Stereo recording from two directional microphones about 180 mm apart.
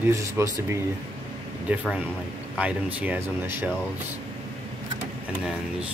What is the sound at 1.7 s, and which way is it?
Speech, 10° right (ahead or behind).